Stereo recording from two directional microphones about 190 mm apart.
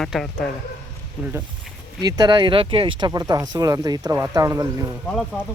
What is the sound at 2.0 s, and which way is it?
Speech, 20° right (ahead or behind).